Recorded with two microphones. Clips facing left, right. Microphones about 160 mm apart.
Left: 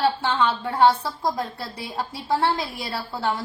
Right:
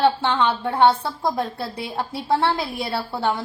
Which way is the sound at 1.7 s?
60° right (ahead or behind).